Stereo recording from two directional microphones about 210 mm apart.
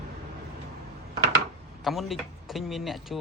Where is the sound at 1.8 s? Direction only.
Centre (ahead or behind).